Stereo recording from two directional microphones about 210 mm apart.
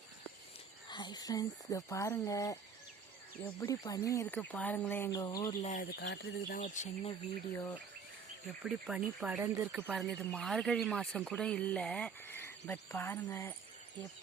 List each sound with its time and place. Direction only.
0.9 s speech: 20° left (ahead or behind)
3.6 s speech: 15° left (ahead or behind)
5.8 s speech: 55° left (ahead or behind)
6.5 s speech: 35° left (ahead or behind)
7.5 s speech: 10° left (ahead or behind)
8.6 s speech: 5° right (ahead or behind)
9.9 s speech: centre (ahead or behind)